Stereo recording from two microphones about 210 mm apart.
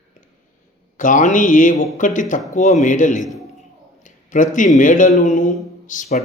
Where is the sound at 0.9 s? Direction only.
40° left (ahead or behind).